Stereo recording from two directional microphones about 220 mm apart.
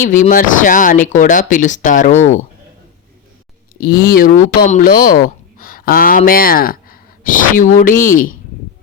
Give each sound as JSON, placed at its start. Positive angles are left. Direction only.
{"t": 0.0, "sound": "speech", "side_deg": 35}
{"t": 3.8, "sound": "speech", "side_deg": 45}